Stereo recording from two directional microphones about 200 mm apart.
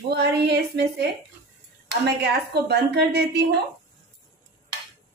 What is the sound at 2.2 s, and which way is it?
Speech, 55° right (ahead or behind).